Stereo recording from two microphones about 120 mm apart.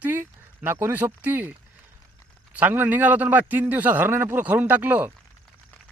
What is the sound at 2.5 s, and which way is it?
A man's voice, 15° right (ahead or behind).